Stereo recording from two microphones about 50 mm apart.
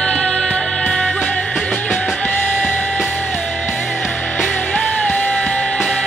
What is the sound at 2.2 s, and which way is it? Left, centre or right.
Music, left.